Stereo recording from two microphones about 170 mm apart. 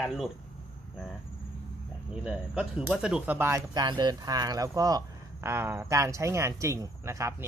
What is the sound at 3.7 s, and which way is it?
Speech, 25° right (ahead or behind).